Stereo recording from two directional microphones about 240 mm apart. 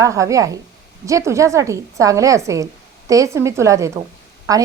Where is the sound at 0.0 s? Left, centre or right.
Centre.